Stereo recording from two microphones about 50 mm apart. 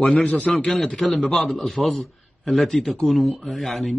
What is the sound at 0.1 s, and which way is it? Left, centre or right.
Speech, left.